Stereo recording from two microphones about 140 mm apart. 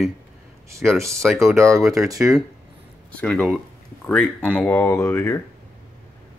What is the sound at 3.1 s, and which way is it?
Speech, 10° left (ahead or behind).